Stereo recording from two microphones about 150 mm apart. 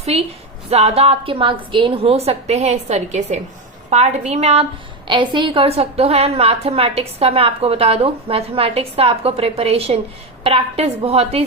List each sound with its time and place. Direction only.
0.0 s a woman's voice: 45° right (ahead or behind)
5.0 s a woman's voice: 30° right (ahead or behind)